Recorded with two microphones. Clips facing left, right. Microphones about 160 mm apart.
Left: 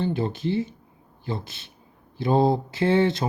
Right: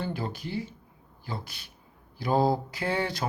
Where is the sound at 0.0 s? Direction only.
25° left (ahead or behind).